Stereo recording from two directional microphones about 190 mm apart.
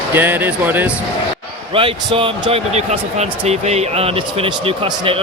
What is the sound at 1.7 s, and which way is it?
Speech, 30° right (ahead or behind).